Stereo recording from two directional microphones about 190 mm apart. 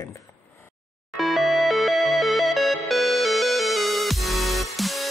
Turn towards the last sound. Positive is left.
turn(degrees=0)  # may be behind; listen again after turning